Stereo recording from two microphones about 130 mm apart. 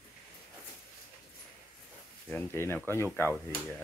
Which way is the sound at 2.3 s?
15° left (ahead or behind).